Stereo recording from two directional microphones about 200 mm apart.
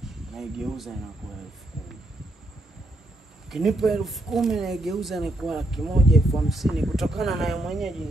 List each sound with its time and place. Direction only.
0.3 s speech: centre (ahead or behind)
3.4 s speech: centre (ahead or behind)